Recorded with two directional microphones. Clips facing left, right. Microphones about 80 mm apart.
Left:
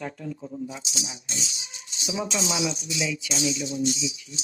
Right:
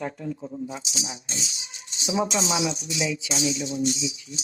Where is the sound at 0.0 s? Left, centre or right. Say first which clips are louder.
Right 3 dB; right.